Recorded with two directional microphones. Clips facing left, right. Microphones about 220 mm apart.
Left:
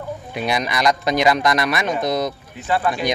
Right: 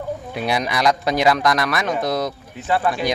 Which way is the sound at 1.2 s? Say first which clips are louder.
Even; centre (ahead or behind).